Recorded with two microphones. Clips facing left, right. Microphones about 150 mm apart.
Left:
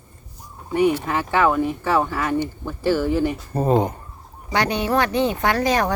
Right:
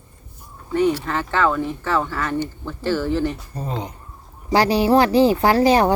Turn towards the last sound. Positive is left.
turn(degrees=-30)  # may be behind; listen again after turning